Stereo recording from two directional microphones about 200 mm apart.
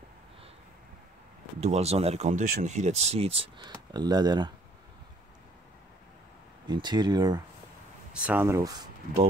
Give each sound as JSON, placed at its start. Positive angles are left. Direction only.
{"t": 1.6, "sound": "speech", "side_deg": -30}
{"t": 6.7, "sound": "speech", "side_deg": -20}
{"t": 8.2, "sound": "speech", "side_deg": -10}